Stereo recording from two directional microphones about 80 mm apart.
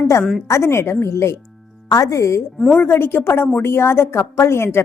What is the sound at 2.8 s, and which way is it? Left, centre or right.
A woman's voice, left.